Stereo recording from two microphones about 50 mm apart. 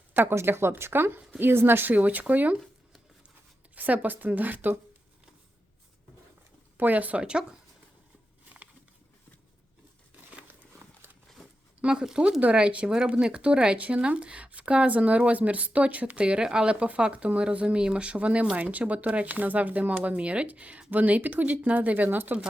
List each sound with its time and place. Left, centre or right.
0.2 s a woman's voice: right
3.8 s speech: right
6.7 s speech: right
7.2 s speech: centre
10.8 s a sound: right
11.9 s speech: centre; by 22.4 s right